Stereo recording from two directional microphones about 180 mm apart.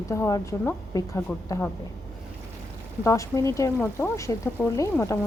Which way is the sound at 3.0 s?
15° left (ahead or behind).